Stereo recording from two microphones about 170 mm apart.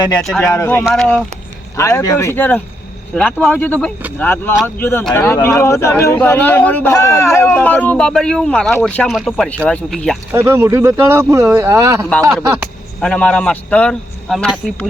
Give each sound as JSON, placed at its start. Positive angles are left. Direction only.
{"t": 0.2, "sound": "speech", "side_deg": 5}
{"t": 0.4, "sound": "speech", "side_deg": 15}
{"t": 0.9, "sound": "speech", "side_deg": 5}
{"t": 1.7, "sound": "speech", "side_deg": 20}
{"t": 10.3, "sound": "speech", "side_deg": -15}
{"t": 13.0, "sound": "speech", "side_deg": 5}